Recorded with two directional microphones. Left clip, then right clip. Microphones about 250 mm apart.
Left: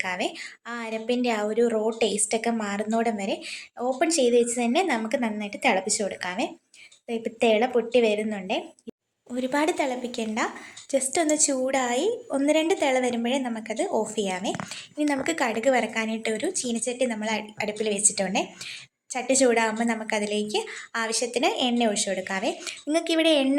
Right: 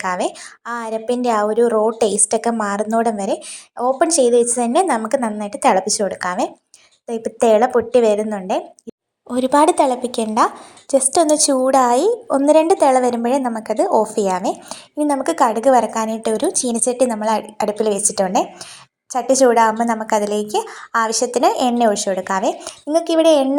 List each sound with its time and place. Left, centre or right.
0.0 s a woman's voice: centre
19.5 s a woman's voice: centre